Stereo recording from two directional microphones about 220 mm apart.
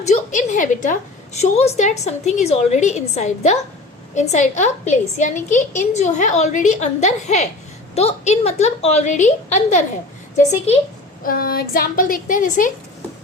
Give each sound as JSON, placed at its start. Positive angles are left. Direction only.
{"t": 0.0, "sound": "a woman's voice", "side_deg": 35}
{"t": 11.2, "sound": "a woman's voice", "side_deg": 40}